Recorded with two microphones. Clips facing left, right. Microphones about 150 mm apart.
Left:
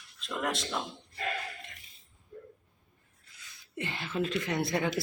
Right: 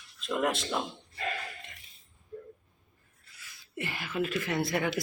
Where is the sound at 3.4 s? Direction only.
20° left (ahead or behind).